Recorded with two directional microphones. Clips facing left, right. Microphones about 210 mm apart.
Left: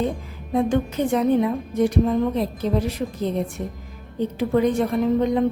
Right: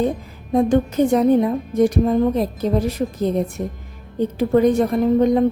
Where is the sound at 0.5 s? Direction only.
40° right (ahead or behind).